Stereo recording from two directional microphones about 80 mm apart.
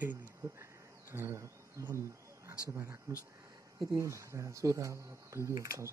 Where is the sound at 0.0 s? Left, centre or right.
Right.